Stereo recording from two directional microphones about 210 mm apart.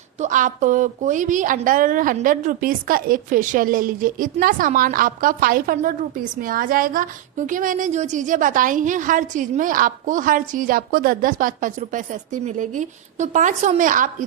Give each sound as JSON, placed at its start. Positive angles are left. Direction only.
{"t": 0.2, "sound": "a woman's voice", "side_deg": -40}